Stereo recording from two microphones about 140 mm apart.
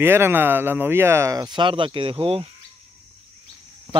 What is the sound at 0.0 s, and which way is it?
Speech, 15° right (ahead or behind).